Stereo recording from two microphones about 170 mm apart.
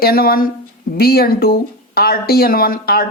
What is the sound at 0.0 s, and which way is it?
A woman's voice, 60° left (ahead or behind).